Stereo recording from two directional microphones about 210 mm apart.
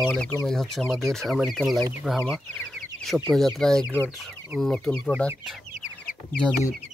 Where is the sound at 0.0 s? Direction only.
Centre (ahead or behind).